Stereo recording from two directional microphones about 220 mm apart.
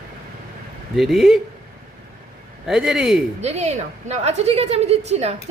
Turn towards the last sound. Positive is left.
turn(degrees=-30)  # may be behind; listen again after turning